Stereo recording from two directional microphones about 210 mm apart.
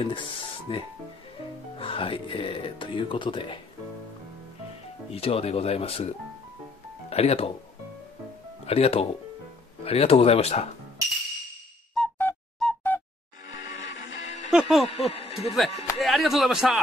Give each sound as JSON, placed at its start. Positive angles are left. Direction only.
{"t": 0.0, "sound": "speech", "side_deg": 25}
{"t": 5.1, "sound": "speech", "side_deg": 30}
{"t": 8.6, "sound": "speech", "side_deg": 30}
{"t": 11.9, "sound": "music", "side_deg": 5}
{"t": 14.5, "sound": "speech", "side_deg": 0}
{"t": 14.9, "sound": "speech", "side_deg": 30}
{"t": 16.0, "sound": "speech", "side_deg": 0}